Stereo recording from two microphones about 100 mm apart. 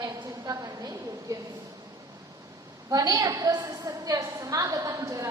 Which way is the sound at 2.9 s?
40° right (ahead or behind).